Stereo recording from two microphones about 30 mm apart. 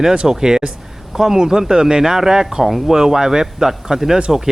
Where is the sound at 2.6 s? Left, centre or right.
Centre.